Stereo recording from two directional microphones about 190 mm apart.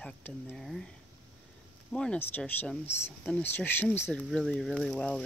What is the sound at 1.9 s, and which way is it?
Speech, 5° left (ahead or behind).